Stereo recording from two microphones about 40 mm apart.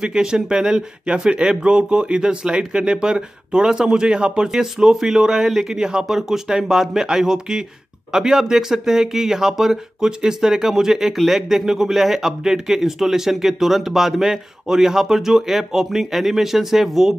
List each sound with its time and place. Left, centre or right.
0.0 s speech: centre
5.8 s speech: centre
6.0 s speech: centre